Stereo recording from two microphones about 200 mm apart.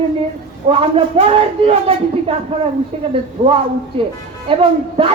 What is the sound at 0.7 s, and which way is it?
Speech, 30° right (ahead or behind).